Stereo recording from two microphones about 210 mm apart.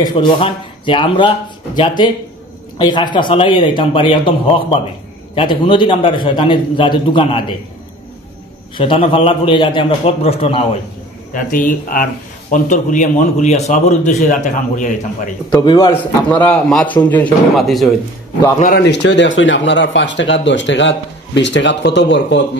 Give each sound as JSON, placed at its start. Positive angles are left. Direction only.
{"t": 0.0, "sound": "a man's voice", "side_deg": 20}
{"t": 8.7, "sound": "a man's voice", "side_deg": 25}
{"t": 11.3, "sound": "speech", "side_deg": 40}
{"t": 15.5, "sound": "a man's voice", "side_deg": 20}
{"t": 15.9, "sound": "a man's voice", "side_deg": 5}
{"t": 18.8, "sound": "speech", "side_deg": 55}